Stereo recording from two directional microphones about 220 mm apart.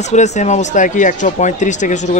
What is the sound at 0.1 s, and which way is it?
A man's voice, 30° left (ahead or behind).